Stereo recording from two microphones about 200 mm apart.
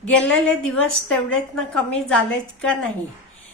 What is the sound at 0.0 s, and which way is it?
Speech, 5° left (ahead or behind).